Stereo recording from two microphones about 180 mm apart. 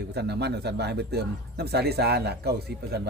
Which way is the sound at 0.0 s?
65° right (ahead or behind).